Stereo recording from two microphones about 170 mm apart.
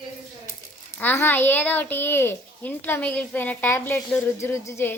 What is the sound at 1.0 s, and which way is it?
A child's voice, 10° left (ahead or behind).